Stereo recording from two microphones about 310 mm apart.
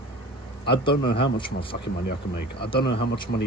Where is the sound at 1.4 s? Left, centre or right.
Centre.